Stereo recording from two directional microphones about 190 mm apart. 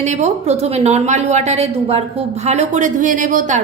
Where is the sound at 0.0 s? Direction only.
40° right (ahead or behind).